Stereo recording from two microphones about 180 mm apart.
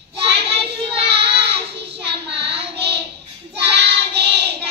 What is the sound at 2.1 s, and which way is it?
Child singing, 70° right (ahead or behind).